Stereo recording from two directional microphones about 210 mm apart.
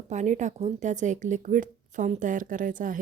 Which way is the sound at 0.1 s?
35° right (ahead or behind).